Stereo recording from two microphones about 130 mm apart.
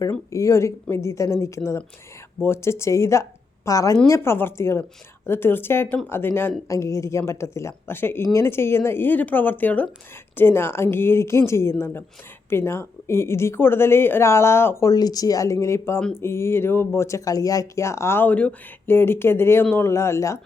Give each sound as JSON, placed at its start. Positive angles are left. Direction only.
{"t": 0.1, "sound": "a woman's voice", "side_deg": 25}